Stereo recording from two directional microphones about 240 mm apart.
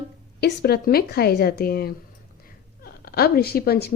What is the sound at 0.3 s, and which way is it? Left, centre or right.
A woman's voice, left.